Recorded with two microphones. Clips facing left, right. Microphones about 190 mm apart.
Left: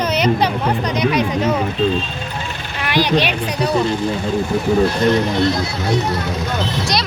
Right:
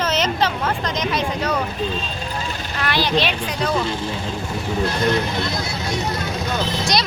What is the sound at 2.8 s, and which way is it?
Speech, 15° left (ahead or behind).